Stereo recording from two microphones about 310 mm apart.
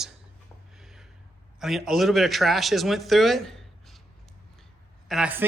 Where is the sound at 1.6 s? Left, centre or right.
Centre.